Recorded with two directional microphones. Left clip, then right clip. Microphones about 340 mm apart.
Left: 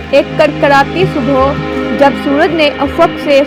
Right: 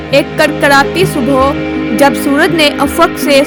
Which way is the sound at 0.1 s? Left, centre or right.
Right.